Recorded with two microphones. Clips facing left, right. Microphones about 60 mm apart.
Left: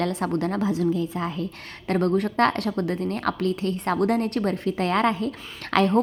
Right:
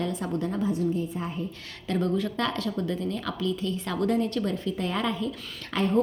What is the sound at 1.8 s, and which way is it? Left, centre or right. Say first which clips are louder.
A woman's voice: left 4 dB; left.